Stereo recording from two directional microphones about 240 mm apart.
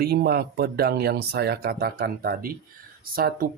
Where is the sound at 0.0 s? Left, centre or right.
Right.